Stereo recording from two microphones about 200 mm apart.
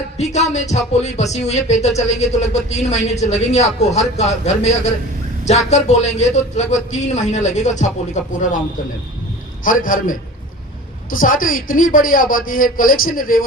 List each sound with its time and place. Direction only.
0.2 s speech: 35° left (ahead or behind)
9.6 s a man's voice: 40° left (ahead or behind)